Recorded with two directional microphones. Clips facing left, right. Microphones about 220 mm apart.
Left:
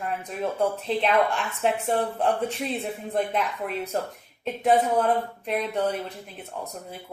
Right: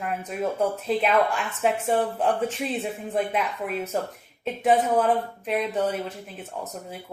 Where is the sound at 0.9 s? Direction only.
5° right (ahead or behind).